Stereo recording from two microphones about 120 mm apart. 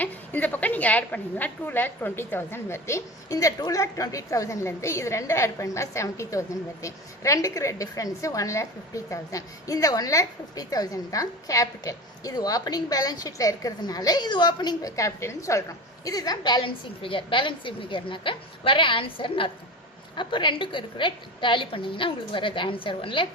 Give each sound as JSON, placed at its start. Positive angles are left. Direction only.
{"t": 0.0, "sound": "a woman's voice", "side_deg": 15}